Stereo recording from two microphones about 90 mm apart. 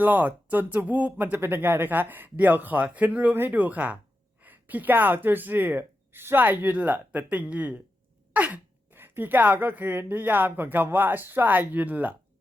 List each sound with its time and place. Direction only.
0.0 s speech: 20° right (ahead or behind)